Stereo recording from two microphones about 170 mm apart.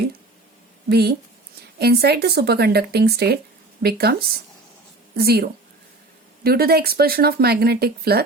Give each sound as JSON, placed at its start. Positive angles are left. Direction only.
{"t": 0.9, "sound": "speech", "side_deg": -70}